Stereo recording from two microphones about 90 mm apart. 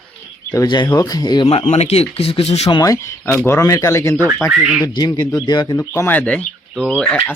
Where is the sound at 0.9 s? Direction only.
45° left (ahead or behind).